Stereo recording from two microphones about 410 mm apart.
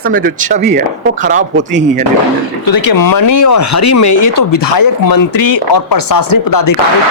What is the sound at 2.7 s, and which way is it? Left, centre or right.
Speech, left.